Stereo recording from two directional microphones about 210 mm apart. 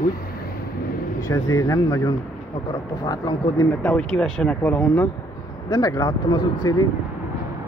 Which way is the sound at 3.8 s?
5° left (ahead or behind).